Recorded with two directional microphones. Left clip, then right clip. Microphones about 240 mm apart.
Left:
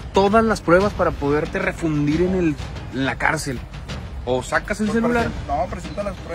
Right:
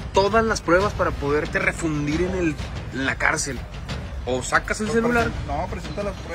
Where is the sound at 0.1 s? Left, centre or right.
Left.